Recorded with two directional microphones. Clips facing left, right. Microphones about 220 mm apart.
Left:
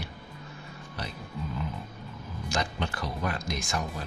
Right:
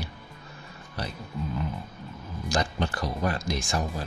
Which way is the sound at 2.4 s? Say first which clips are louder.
Right 4 dB; 35° right (ahead or behind).